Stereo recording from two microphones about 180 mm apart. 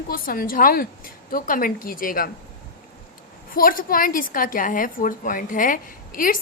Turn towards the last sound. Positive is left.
turn(degrees=50)  # may be behind; listen again after turning